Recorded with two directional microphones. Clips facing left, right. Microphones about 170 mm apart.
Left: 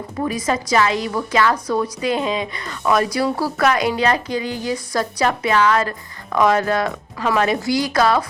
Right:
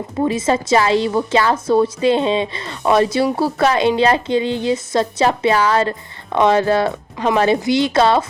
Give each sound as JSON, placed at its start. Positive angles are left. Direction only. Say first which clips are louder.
{"t": 0.2, "sound": "a woman's voice", "louder": "right 4 dB", "side_deg": -25}